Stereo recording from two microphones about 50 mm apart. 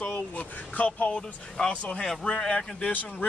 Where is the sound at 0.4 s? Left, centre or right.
Left.